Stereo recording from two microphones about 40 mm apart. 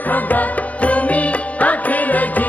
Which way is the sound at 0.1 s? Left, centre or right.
Left.